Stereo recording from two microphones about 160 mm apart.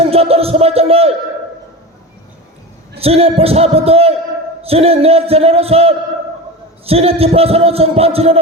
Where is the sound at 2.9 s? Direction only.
40° right (ahead or behind).